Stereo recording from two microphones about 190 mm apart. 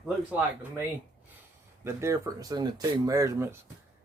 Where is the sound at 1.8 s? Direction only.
15° right (ahead or behind).